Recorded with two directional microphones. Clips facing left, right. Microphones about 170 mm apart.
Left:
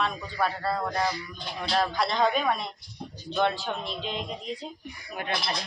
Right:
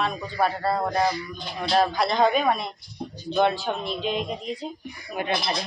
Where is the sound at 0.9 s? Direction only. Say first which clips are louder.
Right 5 dB; 20° right (ahead or behind).